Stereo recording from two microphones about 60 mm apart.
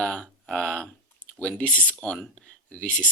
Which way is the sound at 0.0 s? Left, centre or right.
Centre.